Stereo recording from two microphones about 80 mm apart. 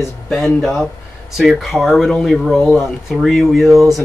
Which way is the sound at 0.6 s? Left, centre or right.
Centre.